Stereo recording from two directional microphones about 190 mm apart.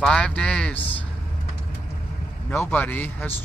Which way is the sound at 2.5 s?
10° left (ahead or behind).